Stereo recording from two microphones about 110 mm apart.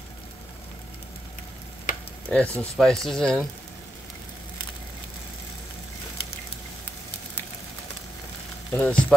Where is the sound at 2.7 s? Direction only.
5° left (ahead or behind).